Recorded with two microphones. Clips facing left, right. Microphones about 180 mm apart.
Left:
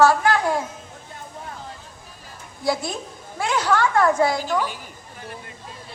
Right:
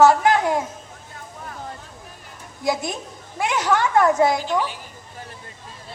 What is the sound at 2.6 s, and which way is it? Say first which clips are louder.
A woman's voice: even; 20° right (ahead or behind).